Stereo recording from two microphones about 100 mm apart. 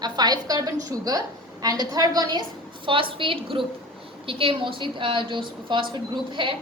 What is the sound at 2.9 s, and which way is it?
A woman's voice, 60° right (ahead or behind).